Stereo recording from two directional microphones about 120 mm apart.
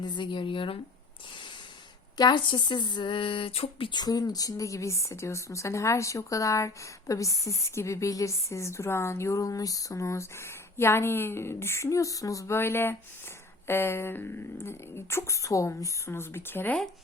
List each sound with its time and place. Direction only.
0.0 s speech: 40° left (ahead or behind)
2.1 s a woman's voice: 35° left (ahead or behind); by 16.8 s 15° left (ahead or behind)